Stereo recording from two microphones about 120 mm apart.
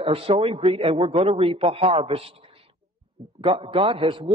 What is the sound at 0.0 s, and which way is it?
A man's voice, 50° right (ahead or behind).